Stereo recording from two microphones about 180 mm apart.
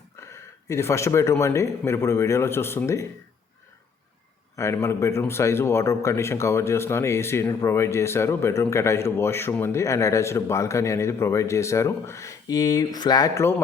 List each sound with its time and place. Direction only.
0.7 s a man's voice: 15° left (ahead or behind)
4.5 s a man's voice: 15° left (ahead or behind)